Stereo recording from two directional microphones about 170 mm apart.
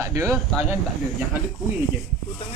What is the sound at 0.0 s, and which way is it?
Speech, 20° right (ahead or behind).